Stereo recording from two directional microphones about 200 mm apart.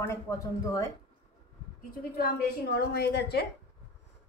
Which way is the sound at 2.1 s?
50° left (ahead or behind).